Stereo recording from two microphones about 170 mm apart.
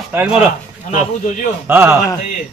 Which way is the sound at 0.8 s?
50° left (ahead or behind).